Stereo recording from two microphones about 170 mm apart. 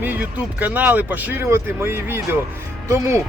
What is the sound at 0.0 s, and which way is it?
Speech, 10° right (ahead or behind).